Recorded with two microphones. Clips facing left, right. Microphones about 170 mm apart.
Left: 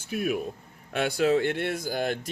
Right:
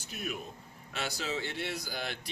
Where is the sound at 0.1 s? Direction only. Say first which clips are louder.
Left 11 dB; 55° left (ahead or behind).